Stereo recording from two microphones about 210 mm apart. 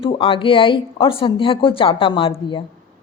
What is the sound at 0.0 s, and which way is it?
Speech, 25° left (ahead or behind).